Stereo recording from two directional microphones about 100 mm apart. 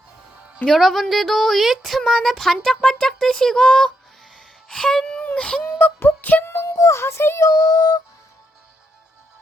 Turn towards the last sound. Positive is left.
turn(degrees=40)  # may be behind; listen again after turning